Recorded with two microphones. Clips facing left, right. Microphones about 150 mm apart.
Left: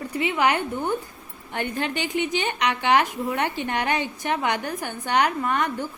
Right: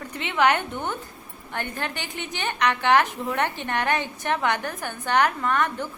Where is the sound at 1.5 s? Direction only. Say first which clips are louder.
Left 4 dB; 15° left (ahead or behind).